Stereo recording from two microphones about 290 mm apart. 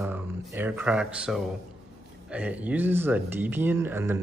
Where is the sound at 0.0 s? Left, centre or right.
Centre.